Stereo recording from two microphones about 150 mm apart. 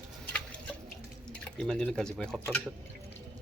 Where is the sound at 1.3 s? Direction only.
5° left (ahead or behind).